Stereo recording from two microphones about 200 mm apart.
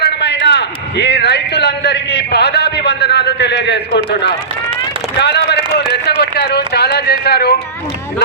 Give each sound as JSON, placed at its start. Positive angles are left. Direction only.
{"t": 0.0, "sound": "a man's voice", "side_deg": 55}